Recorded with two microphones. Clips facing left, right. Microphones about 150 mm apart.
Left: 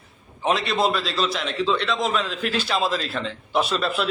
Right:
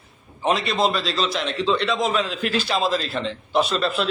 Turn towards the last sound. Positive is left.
turn(degrees=0)  # may be behind; listen again after turning